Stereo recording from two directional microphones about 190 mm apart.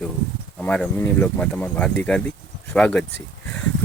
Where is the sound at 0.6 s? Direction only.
10° left (ahead or behind).